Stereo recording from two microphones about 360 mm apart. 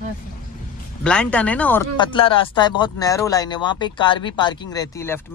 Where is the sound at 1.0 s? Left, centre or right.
Centre.